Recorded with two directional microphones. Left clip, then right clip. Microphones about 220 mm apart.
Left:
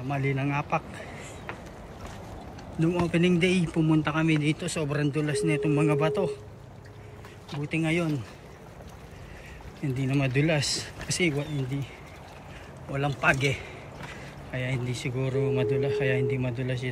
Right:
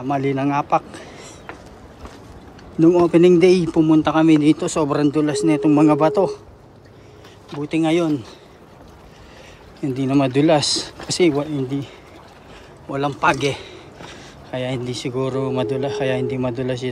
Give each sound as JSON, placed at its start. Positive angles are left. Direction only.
{"t": 0.1, "sound": "a man's voice", "side_deg": -15}
{"t": 2.8, "sound": "a man's voice", "side_deg": -20}
{"t": 7.6, "sound": "a man's voice", "side_deg": -15}
{"t": 9.9, "sound": "a man's voice", "side_deg": -20}
{"t": 13.2, "sound": "speech", "side_deg": -15}